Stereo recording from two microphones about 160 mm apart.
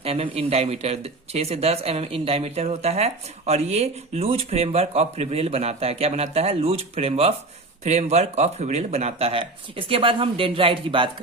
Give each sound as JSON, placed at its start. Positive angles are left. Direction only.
{"t": 0.0, "sound": "speech", "side_deg": -40}